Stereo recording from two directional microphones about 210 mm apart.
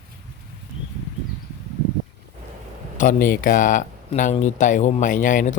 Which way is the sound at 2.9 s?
40° left (ahead or behind).